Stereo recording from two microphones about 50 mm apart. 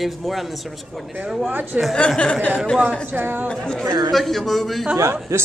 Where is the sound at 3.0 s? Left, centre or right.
Right.